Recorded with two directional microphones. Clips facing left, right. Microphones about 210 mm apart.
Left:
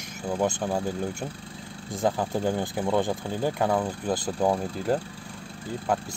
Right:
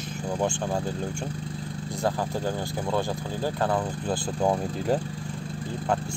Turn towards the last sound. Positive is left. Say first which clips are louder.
# even
turn(degrees=0)  # may be behind; listen again after turning